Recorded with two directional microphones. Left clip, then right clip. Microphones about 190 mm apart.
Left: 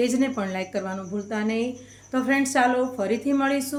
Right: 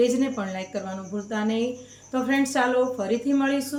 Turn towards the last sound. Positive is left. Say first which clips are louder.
# left 1 dB
turn(degrees=25)  # may be behind; listen again after turning